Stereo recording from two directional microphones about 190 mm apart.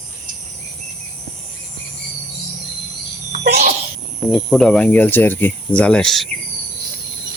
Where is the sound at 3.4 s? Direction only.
60° right (ahead or behind).